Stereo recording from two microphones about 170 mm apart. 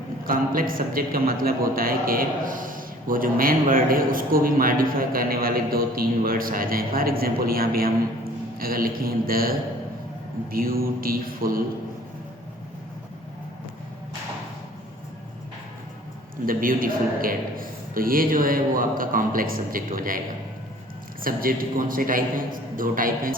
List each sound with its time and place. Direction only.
0.3 s a man's voice: 55° right (ahead or behind)
16.5 s a man's voice: 55° right (ahead or behind)
21.2 s a man's voice: 55° right (ahead or behind)